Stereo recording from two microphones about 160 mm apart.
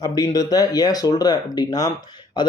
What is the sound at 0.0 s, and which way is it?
Speech, 20° left (ahead or behind).